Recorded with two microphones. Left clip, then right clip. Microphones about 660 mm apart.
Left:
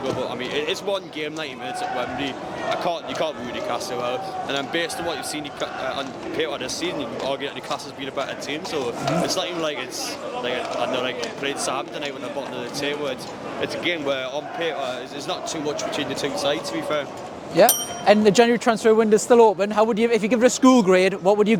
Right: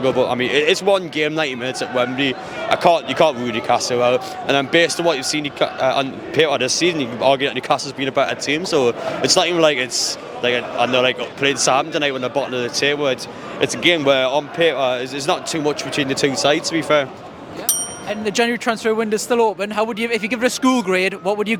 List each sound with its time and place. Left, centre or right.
0.0 s speech: right
18.3 s speech: centre